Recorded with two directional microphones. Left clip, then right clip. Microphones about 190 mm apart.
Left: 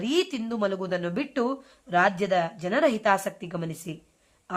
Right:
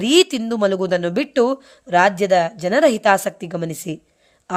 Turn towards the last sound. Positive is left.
turn(degrees=-40)  # may be behind; listen again after turning